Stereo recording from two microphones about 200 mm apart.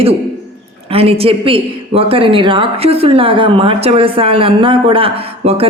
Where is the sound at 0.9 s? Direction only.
30° right (ahead or behind).